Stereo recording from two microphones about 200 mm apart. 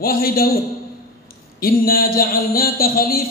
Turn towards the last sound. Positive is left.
turn(degrees=50)  # may be behind; listen again after turning